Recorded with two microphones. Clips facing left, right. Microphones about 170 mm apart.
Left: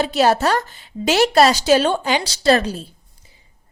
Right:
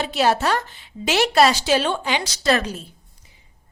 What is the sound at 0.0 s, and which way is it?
A woman's voice, 40° left (ahead or behind).